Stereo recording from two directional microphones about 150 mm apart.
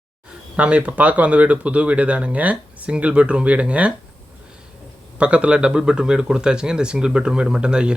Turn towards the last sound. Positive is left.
turn(degrees=-5)  # may be behind; listen again after turning